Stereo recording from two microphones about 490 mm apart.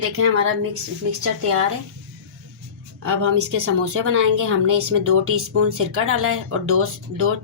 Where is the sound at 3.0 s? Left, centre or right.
Right.